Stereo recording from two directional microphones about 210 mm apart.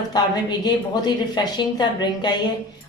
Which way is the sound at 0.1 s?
20° left (ahead or behind).